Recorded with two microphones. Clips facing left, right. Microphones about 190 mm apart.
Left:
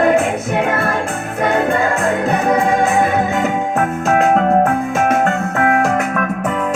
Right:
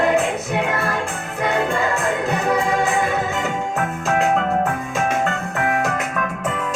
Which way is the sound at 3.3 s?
55° left (ahead or behind).